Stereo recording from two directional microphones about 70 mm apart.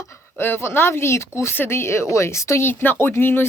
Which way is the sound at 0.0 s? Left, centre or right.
Left.